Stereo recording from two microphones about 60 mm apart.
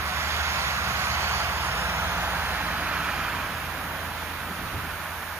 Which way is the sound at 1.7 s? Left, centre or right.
Right.